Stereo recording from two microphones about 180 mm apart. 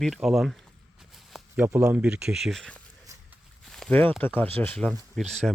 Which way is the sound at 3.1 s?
15° right (ahead or behind).